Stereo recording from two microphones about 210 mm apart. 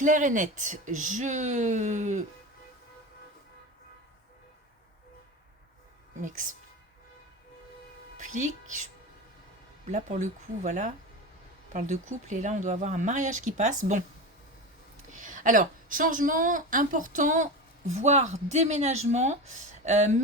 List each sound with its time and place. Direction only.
0.0 s speech: 40° right (ahead or behind)
8.2 s speech: 35° right (ahead or behind)
9.9 s speech: 35° right (ahead or behind)
15.1 s a woman's voice: 40° right (ahead or behind)